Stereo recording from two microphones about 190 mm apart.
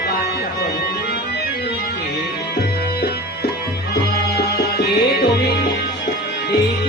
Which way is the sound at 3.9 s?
55° left (ahead or behind).